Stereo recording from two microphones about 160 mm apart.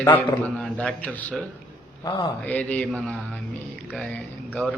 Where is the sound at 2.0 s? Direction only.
25° left (ahead or behind).